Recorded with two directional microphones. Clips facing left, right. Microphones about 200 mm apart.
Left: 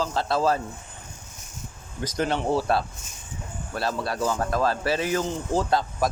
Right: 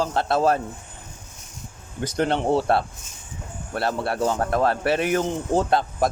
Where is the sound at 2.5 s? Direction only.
25° right (ahead or behind).